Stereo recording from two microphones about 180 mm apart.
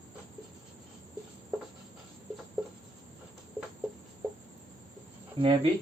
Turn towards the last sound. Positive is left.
turn(degrees=-30)  # may be behind; listen again after turning